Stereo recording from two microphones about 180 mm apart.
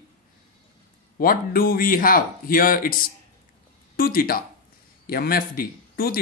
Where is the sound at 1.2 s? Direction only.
55° left (ahead or behind).